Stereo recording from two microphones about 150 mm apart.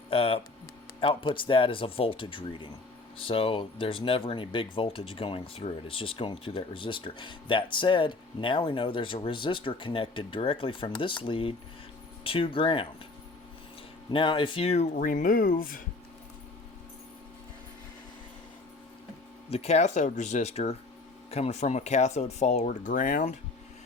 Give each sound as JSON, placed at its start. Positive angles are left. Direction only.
{"t": 0.1, "sound": "speech", "side_deg": 40}
{"t": 14.1, "sound": "speech", "side_deg": 35}
{"t": 14.9, "sound": "speech", "side_deg": 65}
{"t": 19.5, "sound": "speech", "side_deg": 45}